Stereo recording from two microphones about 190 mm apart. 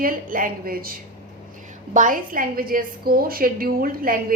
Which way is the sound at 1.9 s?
45° right (ahead or behind).